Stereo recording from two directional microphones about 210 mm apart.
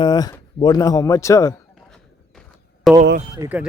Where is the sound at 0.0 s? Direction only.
15° left (ahead or behind).